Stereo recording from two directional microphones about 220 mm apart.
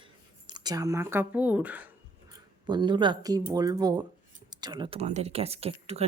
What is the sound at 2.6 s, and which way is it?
A woman's voice, 20° right (ahead or behind).